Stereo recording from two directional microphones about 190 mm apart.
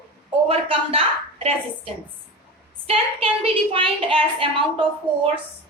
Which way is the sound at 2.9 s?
30° right (ahead or behind).